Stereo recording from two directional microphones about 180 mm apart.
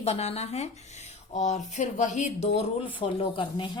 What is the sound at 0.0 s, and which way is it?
Speech, 35° left (ahead or behind).